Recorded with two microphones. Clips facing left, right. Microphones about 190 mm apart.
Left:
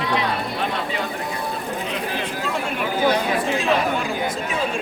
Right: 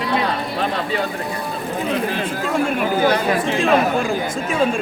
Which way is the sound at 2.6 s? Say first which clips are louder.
Right 2 dB; 50° right (ahead or behind).